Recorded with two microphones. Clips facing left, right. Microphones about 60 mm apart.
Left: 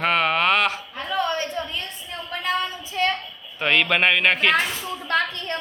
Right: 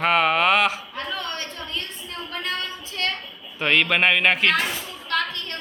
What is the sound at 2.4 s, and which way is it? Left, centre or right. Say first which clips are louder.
Child singing: left 6 dB; centre.